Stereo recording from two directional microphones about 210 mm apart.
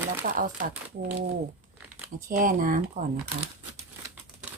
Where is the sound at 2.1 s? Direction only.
40° right (ahead or behind).